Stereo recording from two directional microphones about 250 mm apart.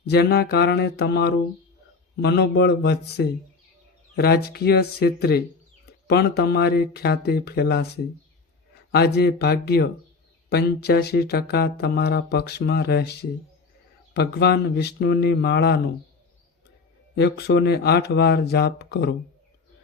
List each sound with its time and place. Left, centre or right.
0.0 s speech: left
8.9 s speech: left
17.2 s speech: left